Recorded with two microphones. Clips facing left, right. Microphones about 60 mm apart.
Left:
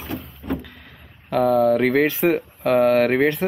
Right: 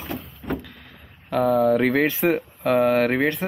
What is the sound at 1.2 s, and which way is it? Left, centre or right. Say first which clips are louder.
Speech: left 2 dB; centre.